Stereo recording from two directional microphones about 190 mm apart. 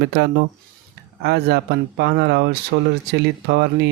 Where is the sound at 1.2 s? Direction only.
60° right (ahead or behind).